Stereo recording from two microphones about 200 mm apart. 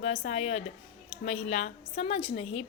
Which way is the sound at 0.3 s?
35° left (ahead or behind).